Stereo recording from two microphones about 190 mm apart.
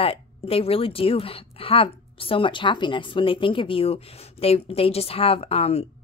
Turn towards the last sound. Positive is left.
turn(degrees=30)  # may be behind; listen again after turning